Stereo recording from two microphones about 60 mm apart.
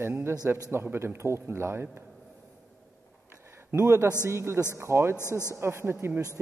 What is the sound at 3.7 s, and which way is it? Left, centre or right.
Speech, right.